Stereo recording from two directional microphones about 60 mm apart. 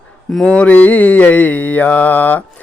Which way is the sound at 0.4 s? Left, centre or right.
Left.